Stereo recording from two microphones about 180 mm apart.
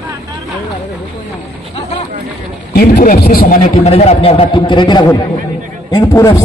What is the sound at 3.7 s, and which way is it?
A man's voice, 35° left (ahead or behind).